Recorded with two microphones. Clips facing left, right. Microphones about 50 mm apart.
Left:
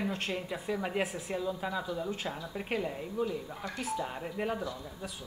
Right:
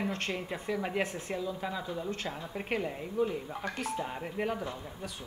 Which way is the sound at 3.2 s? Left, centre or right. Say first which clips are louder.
Right 3 dB; right.